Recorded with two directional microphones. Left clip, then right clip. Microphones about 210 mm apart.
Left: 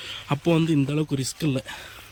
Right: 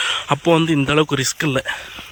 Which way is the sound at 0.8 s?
25° right (ahead or behind).